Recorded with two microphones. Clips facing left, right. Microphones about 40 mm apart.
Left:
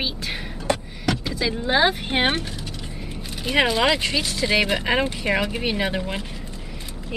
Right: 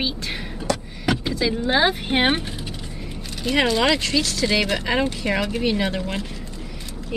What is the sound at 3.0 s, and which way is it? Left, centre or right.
Speech, centre.